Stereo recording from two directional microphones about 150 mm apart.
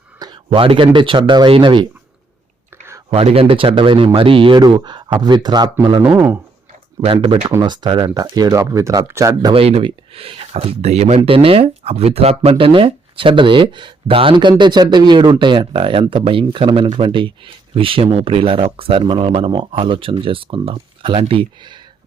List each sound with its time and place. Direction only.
0.2 s speech: 30° right (ahead or behind)
3.1 s speech: 40° right (ahead or behind)
6.1 s speech: 15° right (ahead or behind)
7.0 s speech: 40° right (ahead or behind)
7.4 s speech: 25° right (ahead or behind)
9.5 s speech: 40° right (ahead or behind)